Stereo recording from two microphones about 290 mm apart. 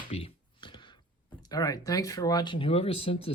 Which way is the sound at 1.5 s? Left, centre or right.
Centre.